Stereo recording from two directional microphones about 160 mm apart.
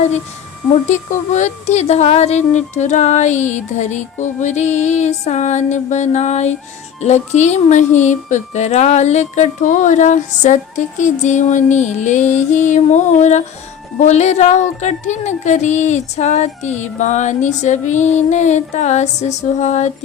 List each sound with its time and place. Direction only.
0.7 s speech: 45° left (ahead or behind)